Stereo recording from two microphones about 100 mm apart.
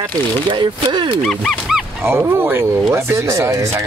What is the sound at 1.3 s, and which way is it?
Speech, centre (ahead or behind).